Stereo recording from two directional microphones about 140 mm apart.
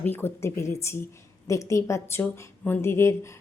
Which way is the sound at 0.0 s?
15° left (ahead or behind).